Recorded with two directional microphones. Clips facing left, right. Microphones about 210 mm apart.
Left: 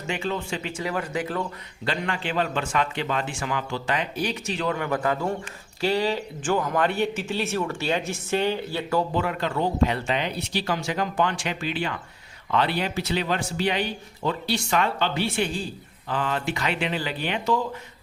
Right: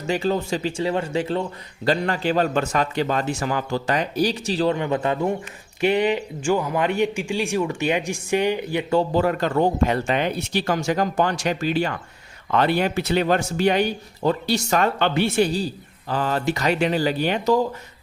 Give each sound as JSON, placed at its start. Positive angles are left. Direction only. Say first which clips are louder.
{"t": 0.1, "sound": "speech", "louder": "right 6 dB", "side_deg": -40}
{"t": 1.8, "sound": "a man's voice", "louder": "right 7 dB", "side_deg": -40}
{"t": 9.0, "sound": "speech", "louder": "right 5 dB", "side_deg": -40}
{"t": 14.9, "sound": "speech", "louder": "right 5 dB", "side_deg": -55}
{"t": 15.4, "sound": "a man's voice", "louder": "right 6 dB", "side_deg": -40}